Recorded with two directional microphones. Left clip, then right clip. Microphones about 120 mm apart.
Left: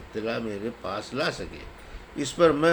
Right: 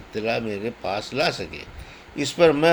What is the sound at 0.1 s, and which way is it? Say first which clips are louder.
Speech: right 5 dB; 40° right (ahead or behind).